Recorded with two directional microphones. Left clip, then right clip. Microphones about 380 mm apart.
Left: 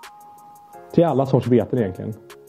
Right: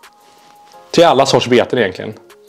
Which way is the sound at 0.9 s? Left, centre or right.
Centre.